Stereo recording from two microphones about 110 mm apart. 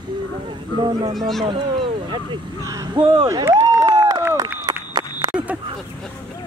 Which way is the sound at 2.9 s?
55° right (ahead or behind).